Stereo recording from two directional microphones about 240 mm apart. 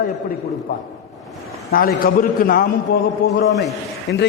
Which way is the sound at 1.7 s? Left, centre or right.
Left.